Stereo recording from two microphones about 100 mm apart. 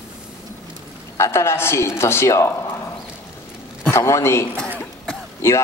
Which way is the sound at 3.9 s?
30° left (ahead or behind).